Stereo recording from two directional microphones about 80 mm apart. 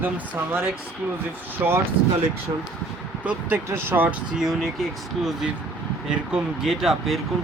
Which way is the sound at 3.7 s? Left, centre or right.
Right.